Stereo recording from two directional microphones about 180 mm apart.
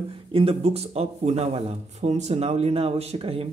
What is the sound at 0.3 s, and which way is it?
Speech, 30° right (ahead or behind).